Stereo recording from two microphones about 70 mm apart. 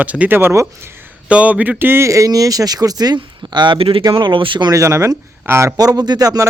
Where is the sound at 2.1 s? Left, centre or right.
Right.